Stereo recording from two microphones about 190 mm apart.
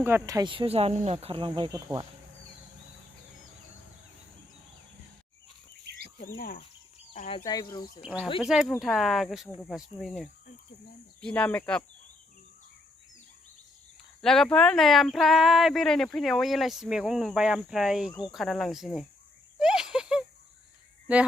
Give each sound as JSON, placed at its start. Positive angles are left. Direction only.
{"t": 0.0, "sound": "speech", "side_deg": -15}
{"t": 6.2, "sound": "speech", "side_deg": 50}
{"t": 7.1, "sound": "speech", "side_deg": 30}
{"t": 8.0, "sound": "speech", "side_deg": -5}
{"t": 14.2, "sound": "speech", "side_deg": 5}
{"t": 19.5, "sound": "a sound", "side_deg": -5}